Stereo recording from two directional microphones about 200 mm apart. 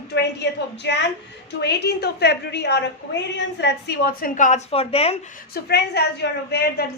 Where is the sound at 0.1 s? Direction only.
55° left (ahead or behind); by 5.1 s 30° left (ahead or behind).